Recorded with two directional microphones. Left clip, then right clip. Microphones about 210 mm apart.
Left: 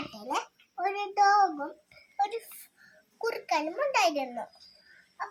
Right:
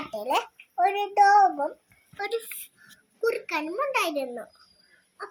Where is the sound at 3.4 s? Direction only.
20° left (ahead or behind).